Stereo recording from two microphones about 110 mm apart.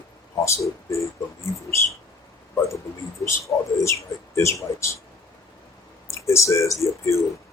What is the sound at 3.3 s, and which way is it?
Speech, 25° left (ahead or behind).